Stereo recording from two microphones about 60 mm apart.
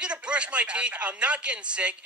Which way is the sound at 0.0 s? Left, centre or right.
Centre.